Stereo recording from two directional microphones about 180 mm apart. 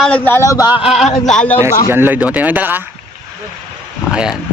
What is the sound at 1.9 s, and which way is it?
Speech, 10° right (ahead or behind).